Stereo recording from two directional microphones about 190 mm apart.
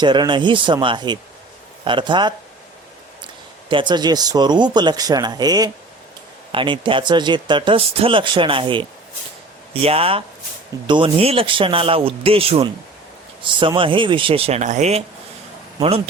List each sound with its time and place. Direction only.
0.0 s speech: 25° right (ahead or behind)
3.7 s speech: 25° right (ahead or behind)